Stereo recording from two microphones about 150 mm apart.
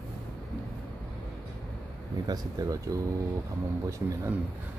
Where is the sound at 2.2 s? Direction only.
25° right (ahead or behind).